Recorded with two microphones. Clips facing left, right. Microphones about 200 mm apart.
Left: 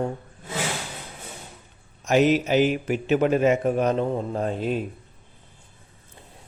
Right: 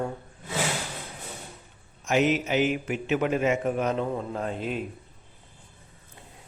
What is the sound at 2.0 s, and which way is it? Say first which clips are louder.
A man's voice: left 4 dB; 35° left (ahead or behind).